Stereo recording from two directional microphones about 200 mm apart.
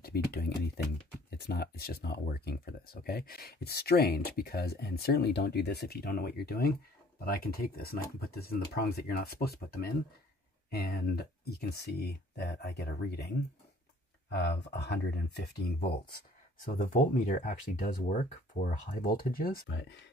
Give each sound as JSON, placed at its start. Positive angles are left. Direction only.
{"t": 0.0, "sound": "speech", "side_deg": 50}
{"t": 14.3, "sound": "speech", "side_deg": 55}
{"t": 16.7, "sound": "speech", "side_deg": 40}